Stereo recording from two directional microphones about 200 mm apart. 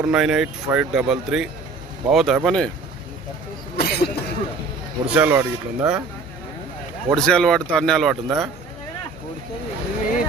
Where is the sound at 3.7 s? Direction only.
50° left (ahead or behind).